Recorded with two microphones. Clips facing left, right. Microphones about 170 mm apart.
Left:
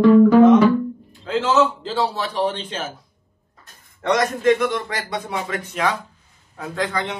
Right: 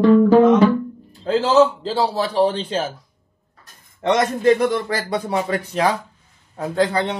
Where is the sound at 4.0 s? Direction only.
25° right (ahead or behind).